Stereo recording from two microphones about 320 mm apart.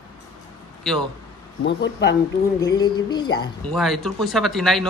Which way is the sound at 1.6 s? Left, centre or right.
Left.